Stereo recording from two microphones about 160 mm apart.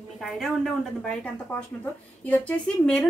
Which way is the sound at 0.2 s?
Centre (ahead or behind).